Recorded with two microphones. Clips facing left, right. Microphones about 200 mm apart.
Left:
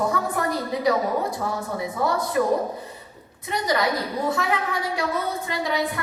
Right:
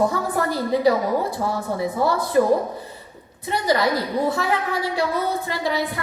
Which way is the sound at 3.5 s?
30° right (ahead or behind).